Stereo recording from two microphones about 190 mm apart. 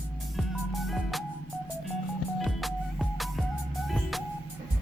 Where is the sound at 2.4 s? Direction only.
Centre (ahead or behind).